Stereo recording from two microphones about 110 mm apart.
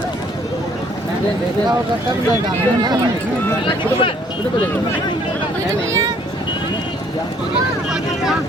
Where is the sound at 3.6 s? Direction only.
50° left (ahead or behind).